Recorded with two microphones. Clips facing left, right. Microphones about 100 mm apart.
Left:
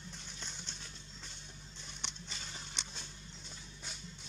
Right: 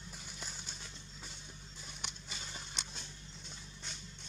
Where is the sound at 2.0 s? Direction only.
5° right (ahead or behind).